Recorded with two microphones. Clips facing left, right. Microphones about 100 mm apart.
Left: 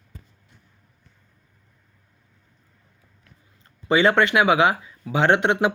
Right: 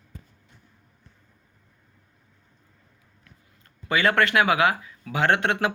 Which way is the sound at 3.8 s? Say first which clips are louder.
Left 4 dB; 25° left (ahead or behind).